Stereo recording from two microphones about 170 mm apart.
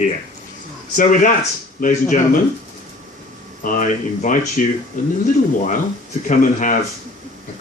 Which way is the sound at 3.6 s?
50° left (ahead or behind).